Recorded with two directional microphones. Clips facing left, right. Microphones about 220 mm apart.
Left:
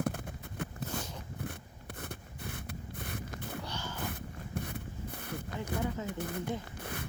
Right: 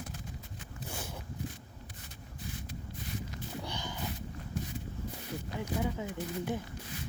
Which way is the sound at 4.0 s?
55° left (ahead or behind).